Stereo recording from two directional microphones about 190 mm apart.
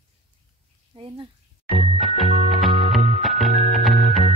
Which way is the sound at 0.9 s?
25° right (ahead or behind).